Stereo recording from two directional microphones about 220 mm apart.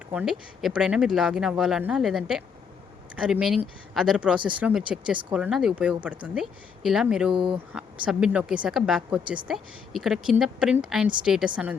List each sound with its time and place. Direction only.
0.1 s speech: 5° right (ahead or behind)
7.3 s speech: 25° right (ahead or behind)
7.7 s speech: 5° right (ahead or behind)